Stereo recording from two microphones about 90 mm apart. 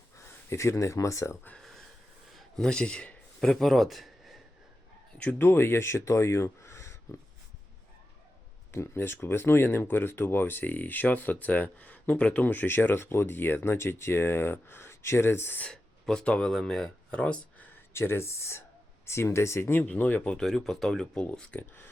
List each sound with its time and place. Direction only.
0.2 s speech: 30° left (ahead or behind)
1.5 s a sound: centre (ahead or behind)
2.3 s speech: 10° left (ahead or behind)
5.1 s speech: 15° left (ahead or behind)
5.4 s speech: 25° left (ahead or behind)
8.7 s speech: 25° left (ahead or behind)
15.6 s speech: 10° left (ahead or behind)
17.9 s speech: 30° left (ahead or behind)
19.8 s speech: 15° left (ahead or behind)